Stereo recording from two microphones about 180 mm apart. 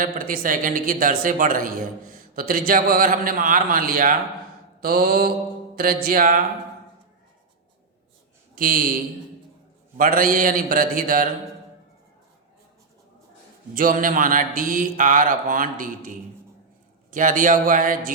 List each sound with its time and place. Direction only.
0.0 s a man's voice: 50° right (ahead or behind)
4.8 s mantra: 55° right (ahead or behind)
5.7 s a man's voice: 55° right (ahead or behind)
8.5 s a man's voice: 50° right (ahead or behind)
10.0 s a man's voice: 50° right (ahead or behind)
13.7 s a man's voice: 50° right (ahead or behind)